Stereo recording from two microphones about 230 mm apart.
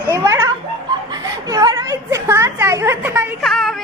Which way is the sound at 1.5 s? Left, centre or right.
Centre.